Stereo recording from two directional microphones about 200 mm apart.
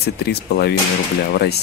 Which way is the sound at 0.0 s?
55° left (ahead or behind).